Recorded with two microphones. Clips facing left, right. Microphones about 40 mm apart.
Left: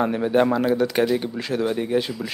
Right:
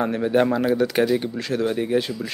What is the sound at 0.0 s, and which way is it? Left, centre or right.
Speech, centre.